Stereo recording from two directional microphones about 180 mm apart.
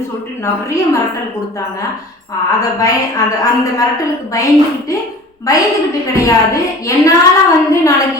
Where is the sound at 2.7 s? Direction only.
20° left (ahead or behind).